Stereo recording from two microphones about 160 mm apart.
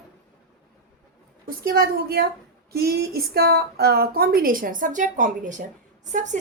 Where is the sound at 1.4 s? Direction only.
70° right (ahead or behind).